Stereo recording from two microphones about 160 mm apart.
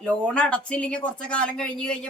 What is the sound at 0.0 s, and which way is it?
Speech, 5° left (ahead or behind).